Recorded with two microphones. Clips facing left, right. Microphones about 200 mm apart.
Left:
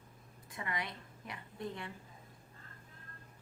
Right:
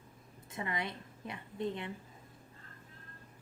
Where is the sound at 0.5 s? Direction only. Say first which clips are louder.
Right 3 dB; 25° right (ahead or behind).